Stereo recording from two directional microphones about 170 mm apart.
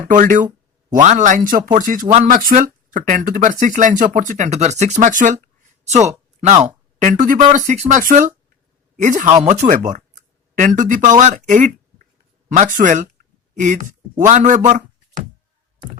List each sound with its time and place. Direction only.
0.1 s speech: 50° right (ahead or behind)
7.0 s speech: 45° right (ahead or behind)